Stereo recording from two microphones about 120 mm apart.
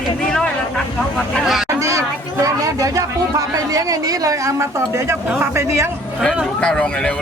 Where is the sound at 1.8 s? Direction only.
25° right (ahead or behind).